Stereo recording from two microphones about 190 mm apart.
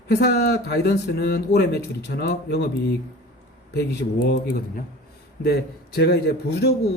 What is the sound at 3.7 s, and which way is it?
Speech, 50° left (ahead or behind).